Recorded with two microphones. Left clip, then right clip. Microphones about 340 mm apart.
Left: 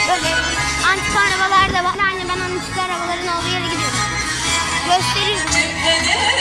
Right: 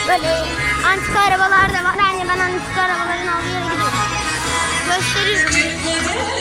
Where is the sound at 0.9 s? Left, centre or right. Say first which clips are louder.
Right 1 dB; centre.